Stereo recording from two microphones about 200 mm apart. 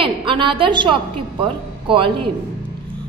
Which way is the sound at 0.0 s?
25° right (ahead or behind).